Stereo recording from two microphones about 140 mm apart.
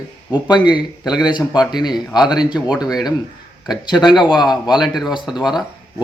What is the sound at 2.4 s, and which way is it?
Speech, 30° left (ahead or behind).